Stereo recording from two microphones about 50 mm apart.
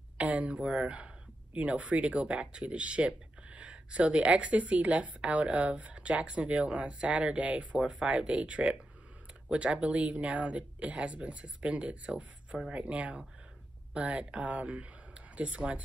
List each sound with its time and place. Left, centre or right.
0.2 s speech: right